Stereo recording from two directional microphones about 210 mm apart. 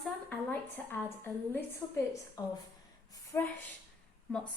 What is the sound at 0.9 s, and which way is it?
A woman's voice, 10° left (ahead or behind).